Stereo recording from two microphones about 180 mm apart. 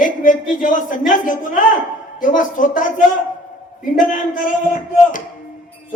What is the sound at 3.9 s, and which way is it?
Speech, 50° left (ahead or behind).